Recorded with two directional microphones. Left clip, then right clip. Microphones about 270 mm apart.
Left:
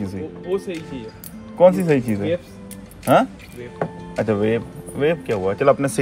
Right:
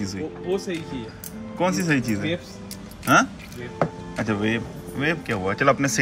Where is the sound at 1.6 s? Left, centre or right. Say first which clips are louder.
Left 9 dB; centre.